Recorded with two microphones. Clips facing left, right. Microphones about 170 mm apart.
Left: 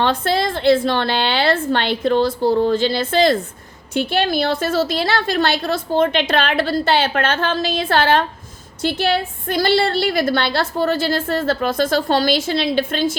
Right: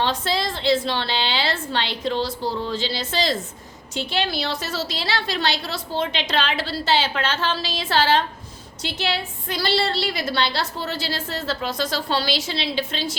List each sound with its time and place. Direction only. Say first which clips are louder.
0.0 s a woman's voice: left 5 dB; 55° left (ahead or behind)